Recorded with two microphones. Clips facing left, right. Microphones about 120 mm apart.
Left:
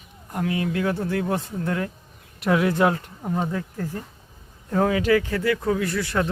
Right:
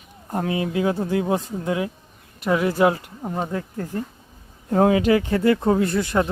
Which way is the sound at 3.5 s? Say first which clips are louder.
Right 1 dB; 30° right (ahead or behind).